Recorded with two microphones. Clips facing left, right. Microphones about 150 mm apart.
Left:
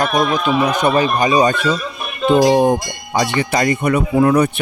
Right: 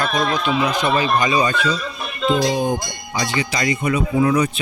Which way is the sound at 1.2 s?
45° left (ahead or behind).